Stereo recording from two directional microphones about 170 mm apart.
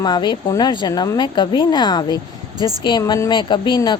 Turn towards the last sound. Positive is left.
turn(degrees=25)  # may be behind; listen again after turning